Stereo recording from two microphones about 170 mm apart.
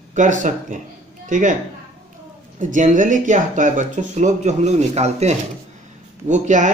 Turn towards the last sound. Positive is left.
turn(degrees=-45)  # may be behind; listen again after turning